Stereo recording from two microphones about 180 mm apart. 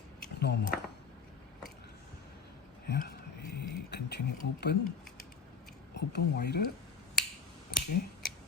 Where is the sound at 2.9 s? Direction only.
65° left (ahead or behind).